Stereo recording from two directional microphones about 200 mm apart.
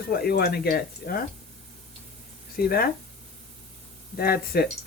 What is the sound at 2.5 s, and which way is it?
Speech, 45° left (ahead or behind).